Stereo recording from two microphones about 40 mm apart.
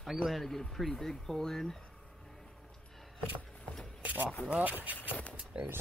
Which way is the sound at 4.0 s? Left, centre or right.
Right.